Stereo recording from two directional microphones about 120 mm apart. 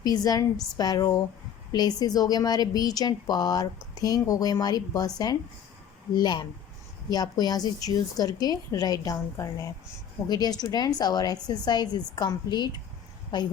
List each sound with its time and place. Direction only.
0.0 s a woman's voice: 30° left (ahead or behind)